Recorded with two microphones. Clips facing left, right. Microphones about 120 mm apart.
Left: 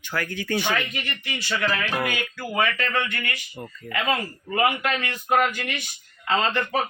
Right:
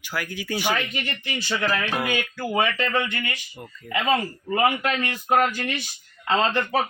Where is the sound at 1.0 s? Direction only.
30° right (ahead or behind).